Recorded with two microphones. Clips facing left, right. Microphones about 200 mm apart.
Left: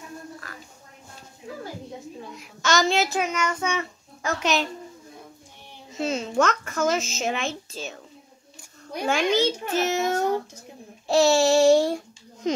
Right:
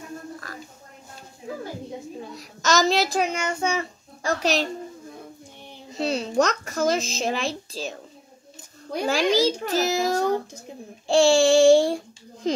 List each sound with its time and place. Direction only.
2.3 s child singing: 40° right (ahead or behind)
5.9 s a woman's voice: 35° right (ahead or behind)
9.0 s a woman's voice: 35° right (ahead or behind)
11.1 s child singing: 30° right (ahead or behind)
12.4 s speech: 30° right (ahead or behind)